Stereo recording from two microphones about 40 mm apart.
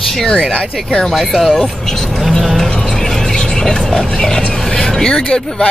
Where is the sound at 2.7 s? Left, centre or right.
Centre.